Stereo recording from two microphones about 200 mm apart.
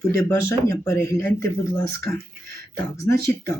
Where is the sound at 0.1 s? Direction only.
15° left (ahead or behind).